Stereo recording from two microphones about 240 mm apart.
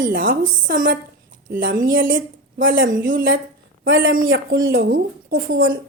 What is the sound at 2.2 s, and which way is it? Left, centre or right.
Speech, right.